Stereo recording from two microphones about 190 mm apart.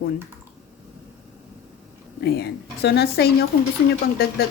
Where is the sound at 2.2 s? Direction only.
55° left (ahead or behind).